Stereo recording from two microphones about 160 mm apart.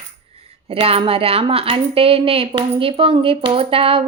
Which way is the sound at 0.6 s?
35° right (ahead or behind).